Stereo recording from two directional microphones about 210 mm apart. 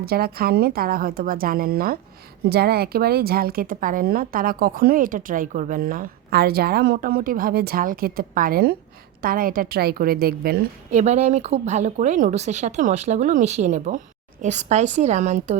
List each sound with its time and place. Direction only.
0.0 s a woman's voice: 45° right (ahead or behind)
10.9 s speech: 30° right (ahead or behind)